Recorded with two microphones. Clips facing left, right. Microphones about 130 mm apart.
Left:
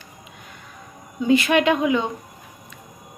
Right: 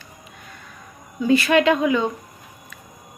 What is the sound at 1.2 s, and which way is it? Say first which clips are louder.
Speech: right 1 dB; 20° left (ahead or behind).